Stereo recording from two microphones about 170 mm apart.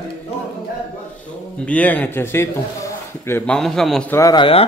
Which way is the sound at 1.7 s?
10° left (ahead or behind).